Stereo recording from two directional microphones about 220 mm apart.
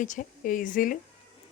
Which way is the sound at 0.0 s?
35° left (ahead or behind).